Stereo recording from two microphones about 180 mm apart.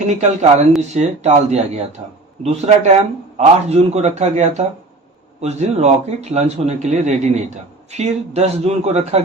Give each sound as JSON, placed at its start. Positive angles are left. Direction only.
{"t": 0.0, "sound": "a man's voice", "side_deg": -40}